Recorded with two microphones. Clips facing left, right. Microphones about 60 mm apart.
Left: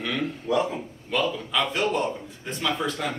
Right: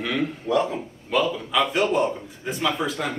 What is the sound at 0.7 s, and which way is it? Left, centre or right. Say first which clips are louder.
A man's voice: right 3 dB; centre.